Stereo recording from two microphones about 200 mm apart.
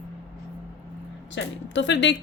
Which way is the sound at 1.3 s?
60° left (ahead or behind).